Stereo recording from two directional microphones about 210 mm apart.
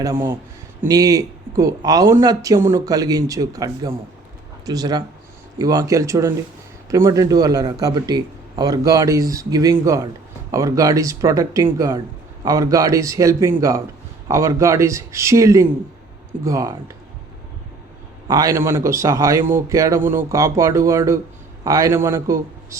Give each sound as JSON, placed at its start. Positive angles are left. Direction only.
{"t": 0.0, "sound": "a man's voice", "side_deg": -15}
{"t": 18.3, "sound": "a man's voice", "side_deg": -15}